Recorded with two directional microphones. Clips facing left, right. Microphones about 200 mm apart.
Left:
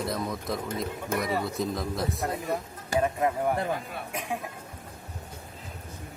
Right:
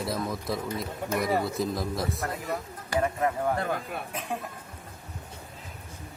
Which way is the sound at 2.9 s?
15° left (ahead or behind).